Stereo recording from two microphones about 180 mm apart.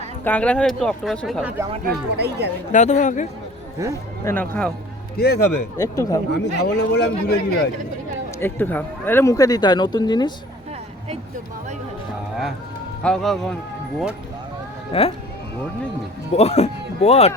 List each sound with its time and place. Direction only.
0.3 s speech: 5° left (ahead or behind)
1.8 s speech: 65° right (ahead or behind)
2.7 s speech: 45° left (ahead or behind)
3.8 s speech: 15° right (ahead or behind)
4.2 s speech: 10° left (ahead or behind)
5.1 s a man's voice: 65° left (ahead or behind)
5.7 s speech: 20° left (ahead or behind)
6.3 s a man's voice: 70° left (ahead or behind)
8.4 s speech: 10° left (ahead or behind)
13.0 s speech: 5° left (ahead or behind)
14.9 s speech: 30° left (ahead or behind)
16.3 s speech: 35° left (ahead or behind)